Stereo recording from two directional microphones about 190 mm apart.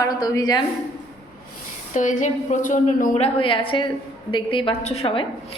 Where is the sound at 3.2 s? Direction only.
30° left (ahead or behind).